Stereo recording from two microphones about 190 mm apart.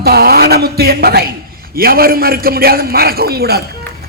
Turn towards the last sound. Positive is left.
turn(degrees=-55)  # may be behind; listen again after turning